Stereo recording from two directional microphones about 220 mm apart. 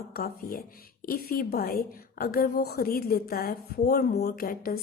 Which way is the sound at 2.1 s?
40° left (ahead or behind).